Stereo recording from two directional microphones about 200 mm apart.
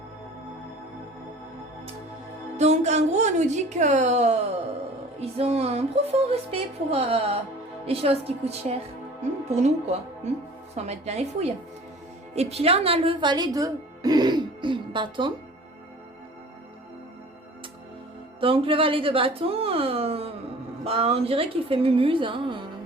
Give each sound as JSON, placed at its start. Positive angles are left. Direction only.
{"t": 2.6, "sound": "a woman's voice", "side_deg": -35}
{"t": 10.8, "sound": "a woman's voice", "side_deg": -35}
{"t": 18.3, "sound": "a woman's voice", "side_deg": -25}